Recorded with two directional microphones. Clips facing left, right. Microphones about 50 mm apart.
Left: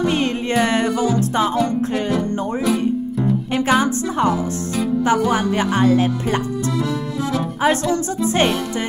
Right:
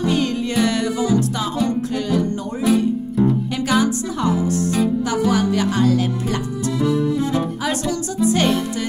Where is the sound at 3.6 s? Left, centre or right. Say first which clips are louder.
Left 4 dB; left.